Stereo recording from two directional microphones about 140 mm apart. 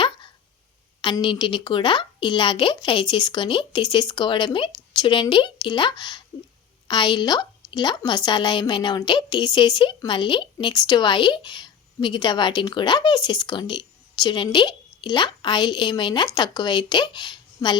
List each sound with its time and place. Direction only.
1.0 s a woman's voice: 35° left (ahead or behind)